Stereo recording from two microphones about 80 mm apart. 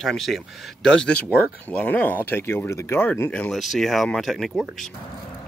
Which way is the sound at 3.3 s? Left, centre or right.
Centre.